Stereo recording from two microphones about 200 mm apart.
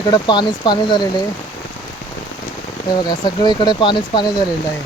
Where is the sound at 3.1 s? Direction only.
20° left (ahead or behind).